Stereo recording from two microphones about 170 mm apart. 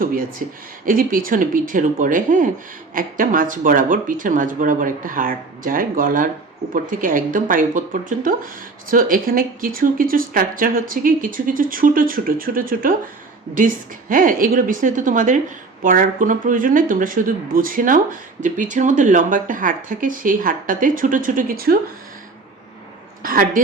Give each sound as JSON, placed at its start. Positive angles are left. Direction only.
{"t": 0.0, "sound": "speech", "side_deg": -55}
{"t": 14.1, "sound": "speech", "side_deg": -55}
{"t": 23.2, "sound": "a woman's voice", "side_deg": -55}